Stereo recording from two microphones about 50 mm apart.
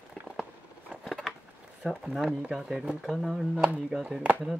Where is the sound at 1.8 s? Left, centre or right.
Centre.